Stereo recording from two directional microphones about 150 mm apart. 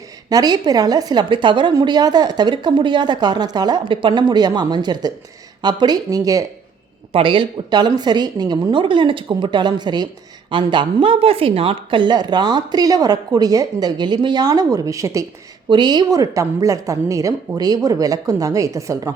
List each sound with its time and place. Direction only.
0.3 s a woman's voice: 25° right (ahead or behind)
7.1 s a woman's voice: 35° right (ahead or behind)